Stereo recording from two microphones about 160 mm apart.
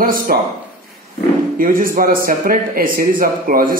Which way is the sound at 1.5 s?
65° right (ahead or behind).